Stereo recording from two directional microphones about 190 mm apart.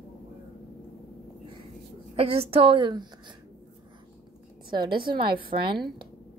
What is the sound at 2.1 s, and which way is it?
Speech, 30° right (ahead or behind).